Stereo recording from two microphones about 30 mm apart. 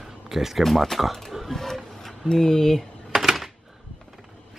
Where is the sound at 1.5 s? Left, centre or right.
Centre.